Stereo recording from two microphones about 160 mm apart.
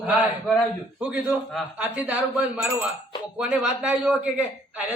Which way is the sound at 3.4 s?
5° right (ahead or behind).